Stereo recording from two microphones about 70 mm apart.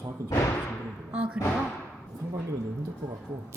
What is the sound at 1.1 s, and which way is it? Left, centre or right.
Speech, centre.